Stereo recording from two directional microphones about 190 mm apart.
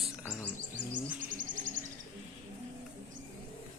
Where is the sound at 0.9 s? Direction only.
45° right (ahead or behind).